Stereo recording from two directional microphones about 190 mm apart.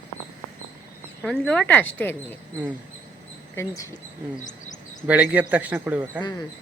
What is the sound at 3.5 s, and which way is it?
Speech, 15° left (ahead or behind).